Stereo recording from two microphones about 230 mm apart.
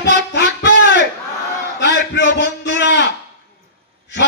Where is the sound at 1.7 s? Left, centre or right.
Left.